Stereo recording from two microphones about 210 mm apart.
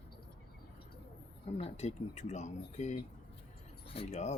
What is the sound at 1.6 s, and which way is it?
Speech, 30° left (ahead or behind).